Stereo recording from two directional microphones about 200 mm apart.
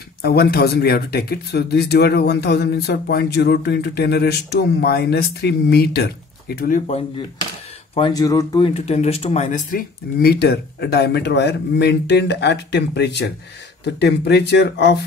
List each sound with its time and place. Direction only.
0.2 s speech: 50° left (ahead or behind)
7.9 s speech: 20° left (ahead or behind)
8.6 s speech: 30° left (ahead or behind); by 15.0 s 60° left (ahead or behind)